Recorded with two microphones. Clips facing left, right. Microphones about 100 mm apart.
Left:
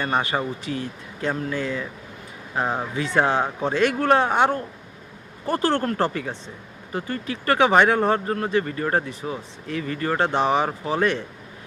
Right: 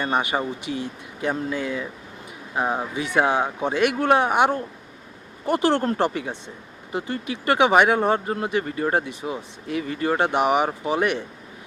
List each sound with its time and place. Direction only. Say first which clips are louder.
0.0 s speech: even; 15° right (ahead or behind)